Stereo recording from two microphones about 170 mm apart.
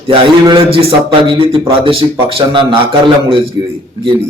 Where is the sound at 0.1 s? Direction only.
30° right (ahead or behind).